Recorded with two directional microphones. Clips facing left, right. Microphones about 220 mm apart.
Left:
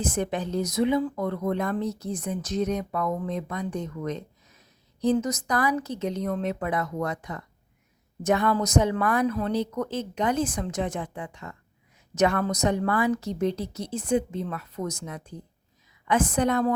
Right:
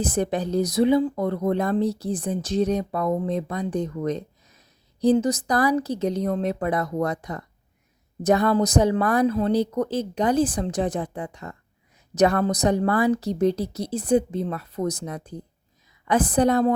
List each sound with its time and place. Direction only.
0.0 s speech: 35° right (ahead or behind)